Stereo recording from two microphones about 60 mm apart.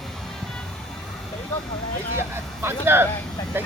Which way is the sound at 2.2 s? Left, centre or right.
Right.